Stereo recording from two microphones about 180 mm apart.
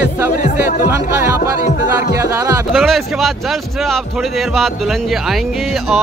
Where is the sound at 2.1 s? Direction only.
15° right (ahead or behind).